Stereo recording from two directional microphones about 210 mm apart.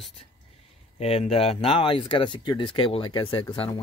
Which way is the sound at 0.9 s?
30° left (ahead or behind).